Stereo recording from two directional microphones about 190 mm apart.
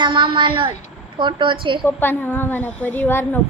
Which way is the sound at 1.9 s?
10° left (ahead or behind).